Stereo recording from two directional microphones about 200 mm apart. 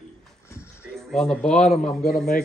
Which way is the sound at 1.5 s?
35° left (ahead or behind).